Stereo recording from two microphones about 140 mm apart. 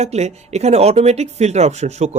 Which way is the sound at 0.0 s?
50° right (ahead or behind).